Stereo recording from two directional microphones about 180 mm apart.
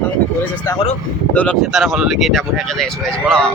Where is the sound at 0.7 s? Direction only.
15° left (ahead or behind).